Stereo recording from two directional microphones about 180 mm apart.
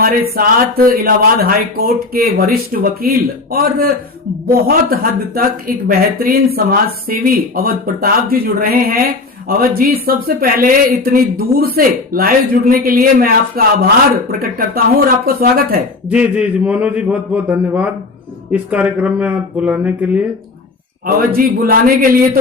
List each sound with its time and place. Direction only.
0.0 s speech: 55° right (ahead or behind)
16.0 s a man's voice: 5° right (ahead or behind)
21.2 s speech: 55° right (ahead or behind)